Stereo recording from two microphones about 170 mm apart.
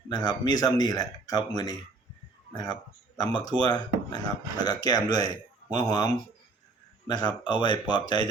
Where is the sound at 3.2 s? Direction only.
25° left (ahead or behind).